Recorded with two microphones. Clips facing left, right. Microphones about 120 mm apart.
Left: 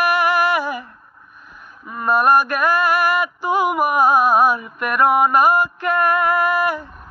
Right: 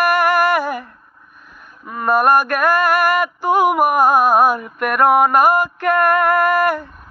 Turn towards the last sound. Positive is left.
turn(degrees=-55)  # may be behind; listen again after turning